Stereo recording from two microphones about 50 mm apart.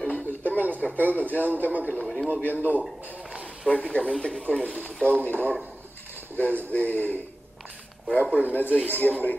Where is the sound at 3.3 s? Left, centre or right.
Right.